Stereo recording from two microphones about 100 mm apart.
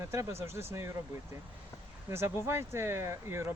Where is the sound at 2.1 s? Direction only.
25° right (ahead or behind).